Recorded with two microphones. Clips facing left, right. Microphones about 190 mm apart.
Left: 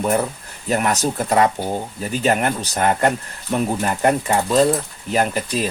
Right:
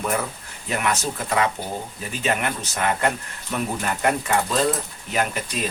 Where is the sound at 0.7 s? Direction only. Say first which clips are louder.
Left 5 dB; 40° left (ahead or behind).